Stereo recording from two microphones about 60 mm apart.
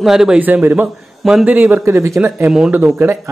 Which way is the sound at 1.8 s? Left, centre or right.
Right.